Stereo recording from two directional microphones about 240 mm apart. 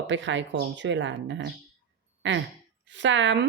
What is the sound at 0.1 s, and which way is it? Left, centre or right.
A woman's voice, right.